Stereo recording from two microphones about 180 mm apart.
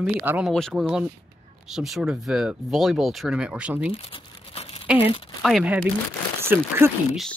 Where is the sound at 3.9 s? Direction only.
30° left (ahead or behind).